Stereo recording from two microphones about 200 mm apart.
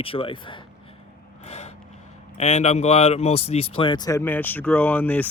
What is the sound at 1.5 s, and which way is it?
Gasp, 30° left (ahead or behind).